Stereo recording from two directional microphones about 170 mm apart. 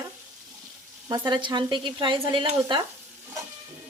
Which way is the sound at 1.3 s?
25° right (ahead or behind).